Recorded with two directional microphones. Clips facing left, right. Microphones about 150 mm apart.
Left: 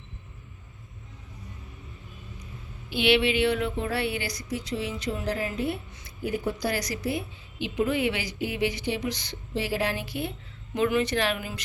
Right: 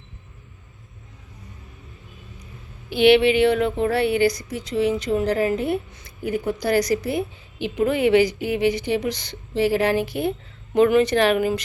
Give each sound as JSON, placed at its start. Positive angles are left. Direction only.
{"t": 3.0, "sound": "speech", "side_deg": -50}